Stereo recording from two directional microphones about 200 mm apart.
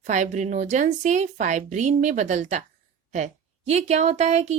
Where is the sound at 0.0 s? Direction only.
35° right (ahead or behind).